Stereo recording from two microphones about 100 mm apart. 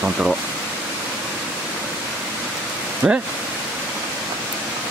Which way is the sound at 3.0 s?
5° right (ahead or behind).